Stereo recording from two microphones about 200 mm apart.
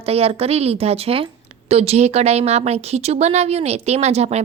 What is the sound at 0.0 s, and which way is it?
A woman's voice, 30° right (ahead or behind).